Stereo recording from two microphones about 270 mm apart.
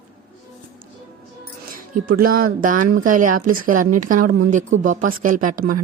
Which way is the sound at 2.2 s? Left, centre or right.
Right.